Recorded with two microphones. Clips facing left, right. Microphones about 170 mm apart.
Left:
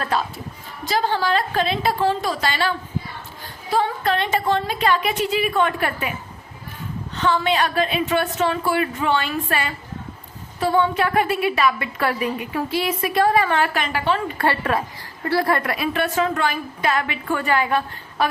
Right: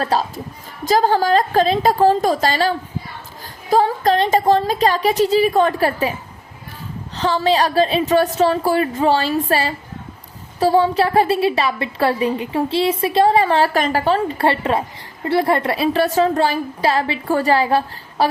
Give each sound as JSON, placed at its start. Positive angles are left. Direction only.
{"t": 0.0, "sound": "a woman's voice", "side_deg": -35}
{"t": 7.2, "sound": "a woman's voice", "side_deg": -35}